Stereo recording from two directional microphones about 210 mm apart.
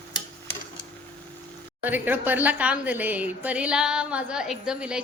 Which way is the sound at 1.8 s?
10° right (ahead or behind).